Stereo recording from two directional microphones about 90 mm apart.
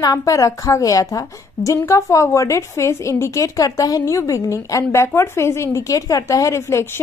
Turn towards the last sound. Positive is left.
turn(degrees=30)  # may be behind; listen again after turning